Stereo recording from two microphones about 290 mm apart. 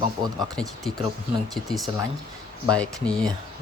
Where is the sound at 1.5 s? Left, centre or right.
Centre.